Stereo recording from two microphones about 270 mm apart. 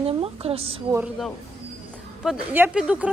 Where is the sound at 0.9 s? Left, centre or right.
Centre.